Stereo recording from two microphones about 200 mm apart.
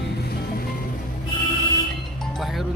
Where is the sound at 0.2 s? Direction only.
50° left (ahead or behind).